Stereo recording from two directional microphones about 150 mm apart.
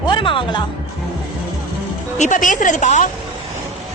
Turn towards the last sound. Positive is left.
turn(degrees=55)  # may be behind; listen again after turning